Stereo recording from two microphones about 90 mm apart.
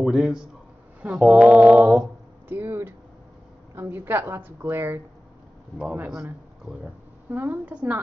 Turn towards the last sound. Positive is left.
turn(degrees=-15)  # may be behind; listen again after turning